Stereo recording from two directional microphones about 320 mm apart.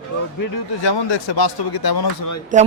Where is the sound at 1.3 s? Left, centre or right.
Left.